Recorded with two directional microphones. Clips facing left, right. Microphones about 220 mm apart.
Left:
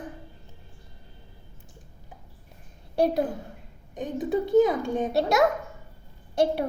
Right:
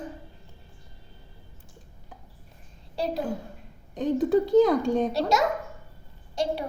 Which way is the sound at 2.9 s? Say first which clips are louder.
Left 6 dB; 60° left (ahead or behind).